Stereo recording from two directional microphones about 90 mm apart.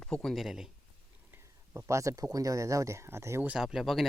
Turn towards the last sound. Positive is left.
turn(degrees=0)  # may be behind; listen again after turning